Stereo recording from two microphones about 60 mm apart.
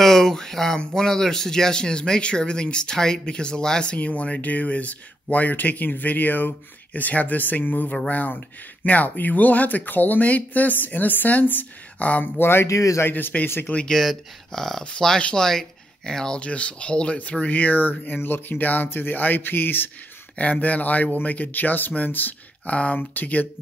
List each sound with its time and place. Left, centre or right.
0.0 s speech: centre; by 12.3 s left
12.4 s speech: left
12.6 s a man's voice: left
13.0 s speech: left
13.8 s speech: centre; by 19.9 s left
20.3 s speech: left